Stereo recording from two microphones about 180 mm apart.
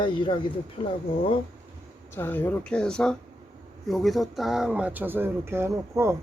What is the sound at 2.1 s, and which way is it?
Speech, 10° left (ahead or behind).